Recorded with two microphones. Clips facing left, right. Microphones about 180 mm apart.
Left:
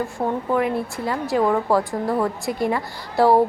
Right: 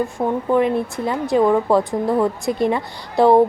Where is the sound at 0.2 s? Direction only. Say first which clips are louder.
Right 2 dB; 5° right (ahead or behind).